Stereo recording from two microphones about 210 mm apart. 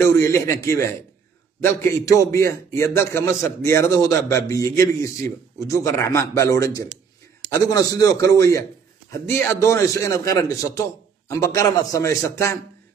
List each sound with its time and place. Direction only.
0.0 s a man's voice: 10° left (ahead or behind)